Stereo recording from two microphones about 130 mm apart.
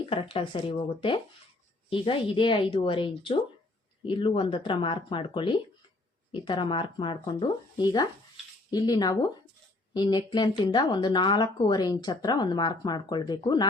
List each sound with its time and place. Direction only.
0.0 s speech: 40° left (ahead or behind)